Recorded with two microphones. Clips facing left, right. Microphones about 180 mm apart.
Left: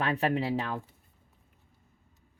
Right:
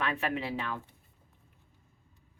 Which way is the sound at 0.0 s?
35° left (ahead or behind).